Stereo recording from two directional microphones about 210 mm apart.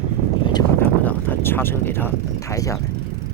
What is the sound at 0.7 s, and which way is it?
Speech, 10° left (ahead or behind).